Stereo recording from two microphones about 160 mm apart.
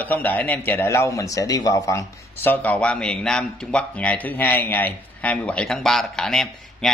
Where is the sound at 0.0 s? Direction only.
10° left (ahead or behind).